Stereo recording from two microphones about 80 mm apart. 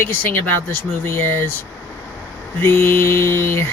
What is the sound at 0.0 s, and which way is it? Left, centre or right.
Speech, left.